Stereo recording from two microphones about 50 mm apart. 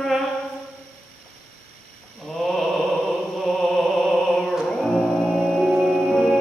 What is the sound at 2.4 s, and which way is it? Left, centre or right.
Mantra, centre.